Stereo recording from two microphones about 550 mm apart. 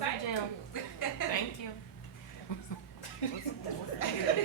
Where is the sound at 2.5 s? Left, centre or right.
Left.